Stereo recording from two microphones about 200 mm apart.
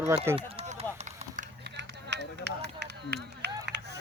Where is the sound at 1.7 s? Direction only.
60° right (ahead or behind).